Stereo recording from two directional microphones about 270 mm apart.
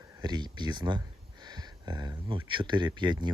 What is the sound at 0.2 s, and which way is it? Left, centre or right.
Speech, centre.